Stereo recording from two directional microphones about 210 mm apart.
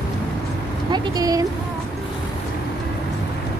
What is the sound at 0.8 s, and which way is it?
Speech, 20° right (ahead or behind).